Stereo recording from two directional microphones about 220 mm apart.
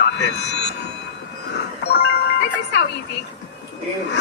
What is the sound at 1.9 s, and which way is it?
Music, 50° left (ahead or behind).